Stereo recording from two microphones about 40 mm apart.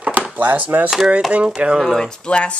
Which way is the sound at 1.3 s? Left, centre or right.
Right.